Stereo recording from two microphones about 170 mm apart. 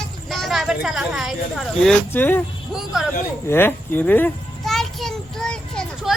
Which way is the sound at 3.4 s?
15° left (ahead or behind).